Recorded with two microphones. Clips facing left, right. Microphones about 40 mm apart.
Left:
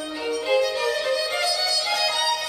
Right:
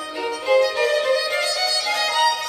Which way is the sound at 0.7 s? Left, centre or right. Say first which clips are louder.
Right 4 dB; right.